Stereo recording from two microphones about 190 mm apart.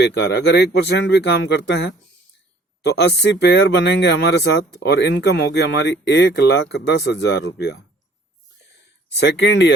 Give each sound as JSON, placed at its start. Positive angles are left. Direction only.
{"t": 0.0, "sound": "speech", "side_deg": 60}
{"t": 9.1, "sound": "speech", "side_deg": 65}